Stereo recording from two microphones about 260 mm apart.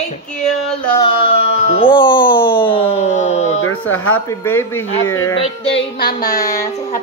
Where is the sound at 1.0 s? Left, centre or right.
Left.